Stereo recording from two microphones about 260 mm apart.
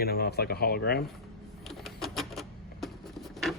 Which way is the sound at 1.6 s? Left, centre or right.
Centre.